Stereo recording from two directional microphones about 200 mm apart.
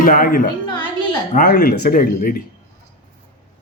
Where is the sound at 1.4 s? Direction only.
45° left (ahead or behind).